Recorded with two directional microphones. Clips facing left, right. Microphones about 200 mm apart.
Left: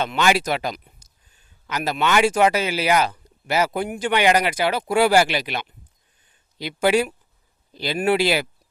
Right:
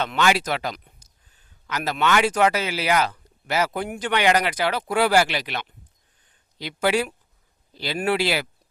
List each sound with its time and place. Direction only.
0.2 s a man's voice: 15° left (ahead or behind)